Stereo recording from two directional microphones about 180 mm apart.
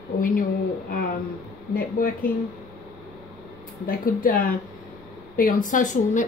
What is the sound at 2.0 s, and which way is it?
Speech, 50° left (ahead or behind).